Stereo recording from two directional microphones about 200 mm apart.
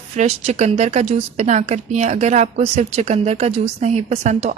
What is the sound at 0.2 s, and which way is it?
A woman's voice, 35° right (ahead or behind).